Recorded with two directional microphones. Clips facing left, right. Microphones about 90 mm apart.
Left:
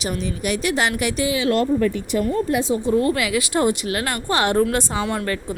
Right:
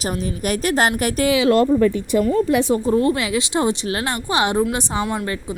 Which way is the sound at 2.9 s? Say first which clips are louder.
Left 2 dB; 25° right (ahead or behind).